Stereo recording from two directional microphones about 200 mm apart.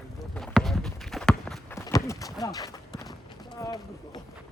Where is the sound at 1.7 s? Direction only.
15° left (ahead or behind).